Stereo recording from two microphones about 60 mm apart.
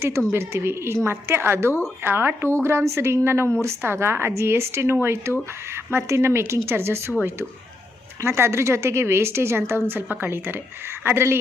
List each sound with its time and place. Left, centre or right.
0.3 s speech: right
8.2 s speech: right